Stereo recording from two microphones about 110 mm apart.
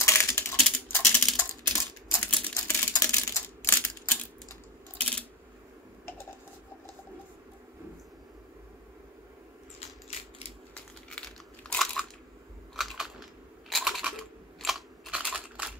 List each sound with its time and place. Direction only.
0.0 s typing: 25° left (ahead or behind)
0.9 s typing: 10° left (ahead or behind)
1.3 s typing: 25° left (ahead or behind)
2.3 s typewriter: 15° left (ahead or behind)
2.9 s a sound: 30° left (ahead or behind)
3.6 s typewriter: 15° left (ahead or behind)
10.7 s crunch: 10° left (ahead or behind)
14.6 s scissors: 5° right (ahead or behind)